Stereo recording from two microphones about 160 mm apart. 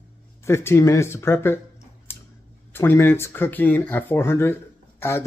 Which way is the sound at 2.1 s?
15° left (ahead or behind).